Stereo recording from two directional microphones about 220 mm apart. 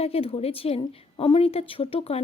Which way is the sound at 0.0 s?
25° left (ahead or behind).